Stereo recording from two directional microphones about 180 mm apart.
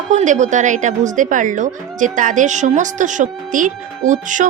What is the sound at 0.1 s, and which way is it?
Speech, 40° right (ahead or behind).